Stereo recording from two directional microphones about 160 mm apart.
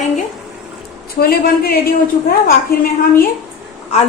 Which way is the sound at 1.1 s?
70° left (ahead or behind).